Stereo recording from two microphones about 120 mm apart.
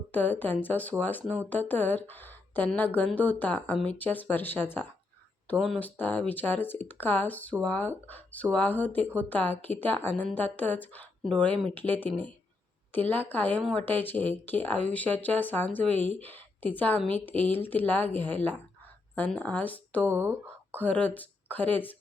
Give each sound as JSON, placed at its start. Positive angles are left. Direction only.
{"t": 0.1, "sound": "speech", "side_deg": 15}
{"t": 5.5, "sound": "speech", "side_deg": -5}
{"t": 5.8, "sound": "speech", "side_deg": 15}
{"t": 20.1, "sound": "speech", "side_deg": -20}
{"t": 20.7, "sound": "speech", "side_deg": 15}